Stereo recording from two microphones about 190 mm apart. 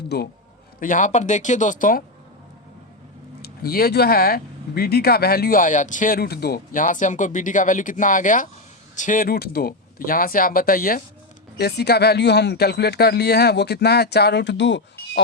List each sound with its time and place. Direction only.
0.8 s speech: 45° left (ahead or behind)
3.4 s speech: 55° left (ahead or behind)